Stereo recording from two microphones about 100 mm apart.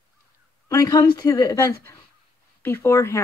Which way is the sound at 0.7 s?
35° left (ahead or behind).